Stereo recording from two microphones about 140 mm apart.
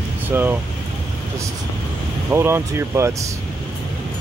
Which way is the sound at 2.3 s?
15° right (ahead or behind).